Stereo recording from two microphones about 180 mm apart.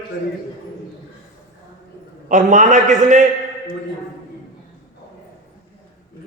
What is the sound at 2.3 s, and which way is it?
Speech, 45° right (ahead or behind).